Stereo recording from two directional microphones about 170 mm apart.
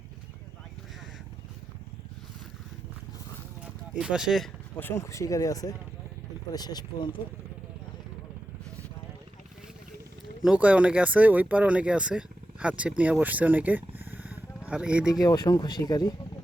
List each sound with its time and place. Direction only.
3.9 s speech: 5° right (ahead or behind)
4.8 s speech: 15° left (ahead or behind)
10.4 s speech: 5° right (ahead or behind)
15.1 s speech: 20° left (ahead or behind)